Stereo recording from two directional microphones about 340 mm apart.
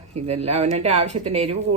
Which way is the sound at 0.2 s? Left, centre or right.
Centre.